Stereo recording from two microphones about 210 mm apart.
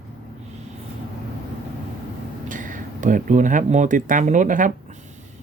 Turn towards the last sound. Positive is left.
turn(degrees=-40)  # may be behind; listen again after turning